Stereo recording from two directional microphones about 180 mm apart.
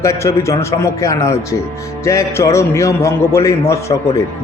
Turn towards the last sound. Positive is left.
turn(degrees=15)  # may be behind; listen again after turning